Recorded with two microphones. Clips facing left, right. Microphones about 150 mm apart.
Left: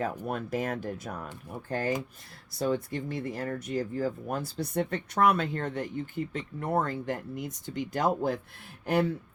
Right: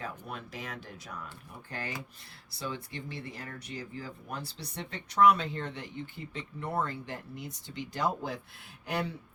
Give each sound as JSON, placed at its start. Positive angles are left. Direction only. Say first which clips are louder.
{"t": 0.3, "sound": "speech", "louder": "left 10 dB", "side_deg": 50}